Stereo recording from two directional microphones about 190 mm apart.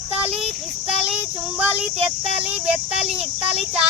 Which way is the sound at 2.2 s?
5° right (ahead or behind).